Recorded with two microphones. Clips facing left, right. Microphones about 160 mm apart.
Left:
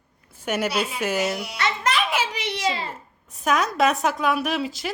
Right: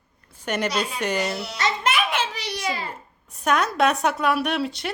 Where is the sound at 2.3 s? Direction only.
20° left (ahead or behind).